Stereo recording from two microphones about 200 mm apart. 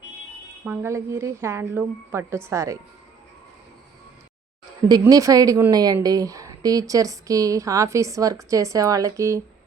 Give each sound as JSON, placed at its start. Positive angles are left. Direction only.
{"t": 0.6, "sound": "a woman's voice", "side_deg": -10}
{"t": 4.9, "sound": "a woman's voice", "side_deg": -20}